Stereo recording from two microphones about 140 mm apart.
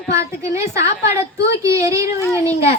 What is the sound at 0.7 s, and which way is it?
Speech, 20° right (ahead or behind).